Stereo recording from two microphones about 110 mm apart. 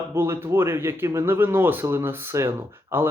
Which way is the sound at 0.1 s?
20° right (ahead or behind).